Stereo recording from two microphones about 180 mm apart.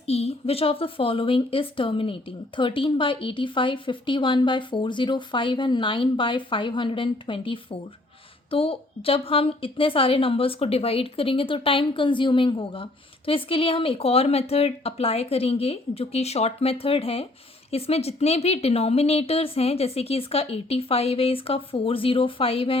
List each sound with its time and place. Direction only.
0.0 s a woman's voice: 35° left (ahead or behind)